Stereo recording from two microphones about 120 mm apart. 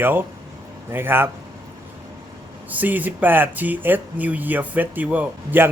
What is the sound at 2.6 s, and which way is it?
Speech, 15° right (ahead or behind).